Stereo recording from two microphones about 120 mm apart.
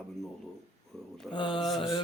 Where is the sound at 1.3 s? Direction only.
45° left (ahead or behind).